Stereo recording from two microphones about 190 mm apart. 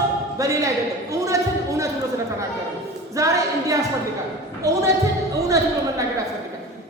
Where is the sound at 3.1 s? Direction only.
15° right (ahead or behind).